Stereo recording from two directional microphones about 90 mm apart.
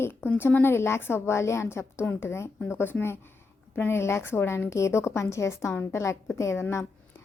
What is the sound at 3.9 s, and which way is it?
A woman's voice, 30° left (ahead or behind).